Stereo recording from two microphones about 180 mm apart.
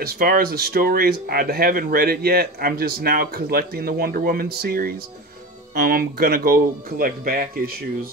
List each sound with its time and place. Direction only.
0.0 s speech: 55° right (ahead or behind)